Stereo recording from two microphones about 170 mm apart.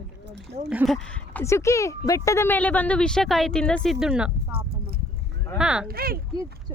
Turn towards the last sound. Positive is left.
turn(degrees=-25)  # may be behind; listen again after turning